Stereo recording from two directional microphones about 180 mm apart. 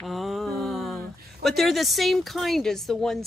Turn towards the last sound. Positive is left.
turn(degrees=0)  # may be behind; listen again after turning